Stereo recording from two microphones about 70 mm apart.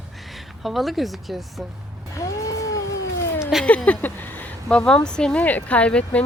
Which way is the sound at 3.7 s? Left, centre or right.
Left.